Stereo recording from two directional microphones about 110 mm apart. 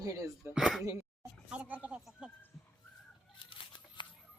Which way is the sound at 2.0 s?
Centre (ahead or behind).